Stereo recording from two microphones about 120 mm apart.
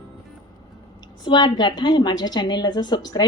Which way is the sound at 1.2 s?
40° left (ahead or behind).